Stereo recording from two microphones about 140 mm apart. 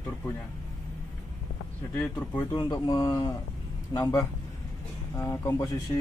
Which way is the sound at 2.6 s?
30° left (ahead or behind).